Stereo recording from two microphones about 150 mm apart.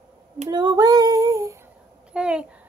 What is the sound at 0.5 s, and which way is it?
Female singing, 30° right (ahead or behind).